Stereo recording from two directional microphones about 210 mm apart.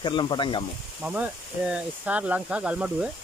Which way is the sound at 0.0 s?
20° left (ahead or behind).